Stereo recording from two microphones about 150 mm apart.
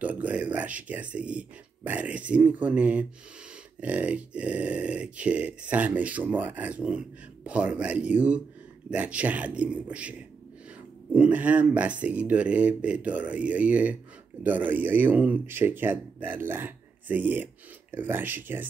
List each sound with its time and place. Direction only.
0.0 s speech: 10° right (ahead or behind)